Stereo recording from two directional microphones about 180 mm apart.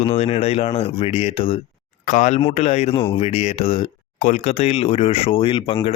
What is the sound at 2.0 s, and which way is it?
Speech, 45° left (ahead or behind).